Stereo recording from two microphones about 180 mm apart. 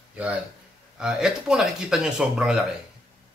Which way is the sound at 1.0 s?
5° right (ahead or behind).